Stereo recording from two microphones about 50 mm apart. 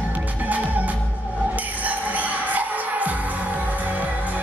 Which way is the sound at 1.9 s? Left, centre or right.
Right.